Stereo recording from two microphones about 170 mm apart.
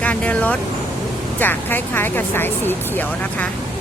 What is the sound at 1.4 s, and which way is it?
Speech, 10° left (ahead or behind).